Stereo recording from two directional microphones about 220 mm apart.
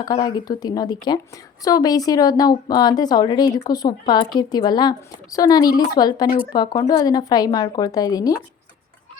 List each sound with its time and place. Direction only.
0.0 s a woman's voice: 20° left (ahead or behind)